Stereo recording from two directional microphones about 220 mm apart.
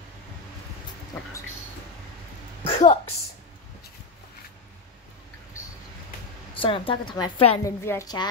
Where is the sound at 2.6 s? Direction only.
25° left (ahead or behind).